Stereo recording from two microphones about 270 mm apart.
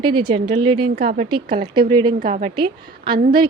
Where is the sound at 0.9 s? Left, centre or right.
Right.